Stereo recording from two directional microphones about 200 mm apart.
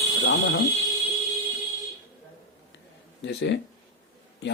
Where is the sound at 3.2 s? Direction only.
60° left (ahead or behind).